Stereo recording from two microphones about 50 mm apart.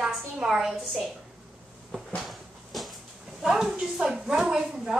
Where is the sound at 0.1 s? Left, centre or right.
Centre.